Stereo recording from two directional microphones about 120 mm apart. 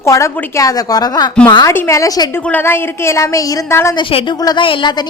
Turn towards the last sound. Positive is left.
turn(degrees=40)  # may be behind; listen again after turning